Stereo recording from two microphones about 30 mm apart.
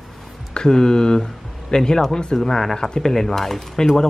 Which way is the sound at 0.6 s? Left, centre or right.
Left.